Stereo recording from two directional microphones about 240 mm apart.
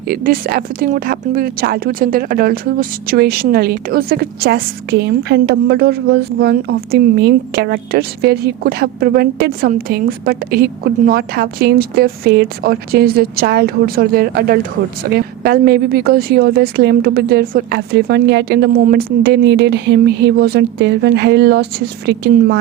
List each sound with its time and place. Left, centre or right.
0.1 s speech: right